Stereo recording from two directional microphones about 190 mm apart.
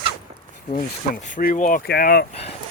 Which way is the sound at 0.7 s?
45° left (ahead or behind).